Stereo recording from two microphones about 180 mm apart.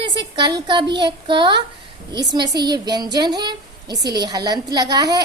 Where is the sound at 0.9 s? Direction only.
25° right (ahead or behind).